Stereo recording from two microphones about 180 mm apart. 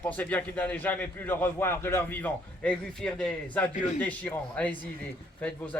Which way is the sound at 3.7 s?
45° left (ahead or behind).